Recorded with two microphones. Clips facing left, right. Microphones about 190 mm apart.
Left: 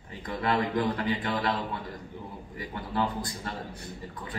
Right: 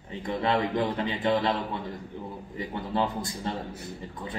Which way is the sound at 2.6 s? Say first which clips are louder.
Right 2 dB; 25° right (ahead or behind).